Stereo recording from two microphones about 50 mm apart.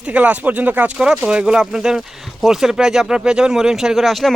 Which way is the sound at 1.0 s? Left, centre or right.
Centre.